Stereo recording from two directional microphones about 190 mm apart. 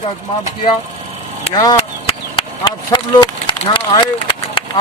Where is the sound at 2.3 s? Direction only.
25° left (ahead or behind).